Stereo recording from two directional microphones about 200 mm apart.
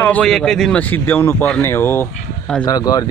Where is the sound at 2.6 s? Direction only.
20° left (ahead or behind).